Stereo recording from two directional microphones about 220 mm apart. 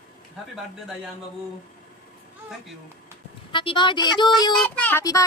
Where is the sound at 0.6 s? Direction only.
Centre (ahead or behind).